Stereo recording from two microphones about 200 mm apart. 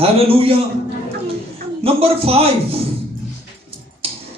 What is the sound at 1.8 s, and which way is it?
Speech, 30° right (ahead or behind).